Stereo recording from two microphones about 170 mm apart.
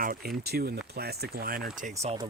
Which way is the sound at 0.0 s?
60° right (ahead or behind).